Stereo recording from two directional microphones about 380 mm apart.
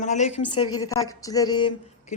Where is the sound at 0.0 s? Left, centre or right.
Centre.